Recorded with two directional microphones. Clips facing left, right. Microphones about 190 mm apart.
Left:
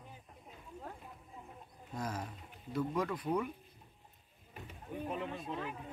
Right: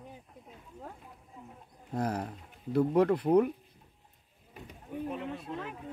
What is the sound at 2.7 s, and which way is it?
Speech, 65° right (ahead or behind).